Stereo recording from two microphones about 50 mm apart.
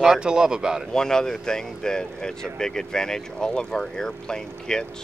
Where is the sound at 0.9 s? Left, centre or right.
Centre.